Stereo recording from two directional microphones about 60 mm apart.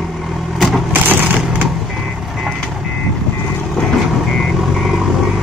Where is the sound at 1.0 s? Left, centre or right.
Right.